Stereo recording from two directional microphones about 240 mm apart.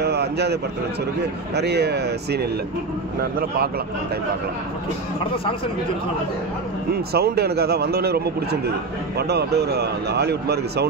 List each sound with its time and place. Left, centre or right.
0.0 s a sound: right
1.5 s a man's voice: right
6.9 s a man's voice: right